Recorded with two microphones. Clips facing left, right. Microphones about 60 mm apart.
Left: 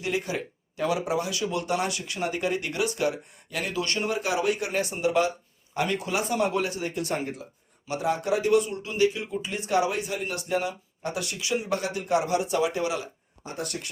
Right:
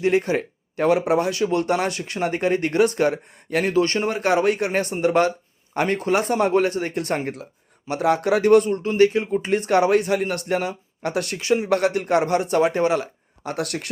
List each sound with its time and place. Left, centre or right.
0.0 s speech: right
11.7 s speech: right
13.4 s speech: right